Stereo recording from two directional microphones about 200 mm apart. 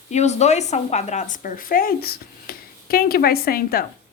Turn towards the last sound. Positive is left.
turn(degrees=50)  # may be behind; listen again after turning